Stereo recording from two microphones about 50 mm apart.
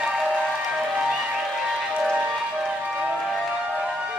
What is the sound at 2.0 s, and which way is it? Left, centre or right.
Music, right.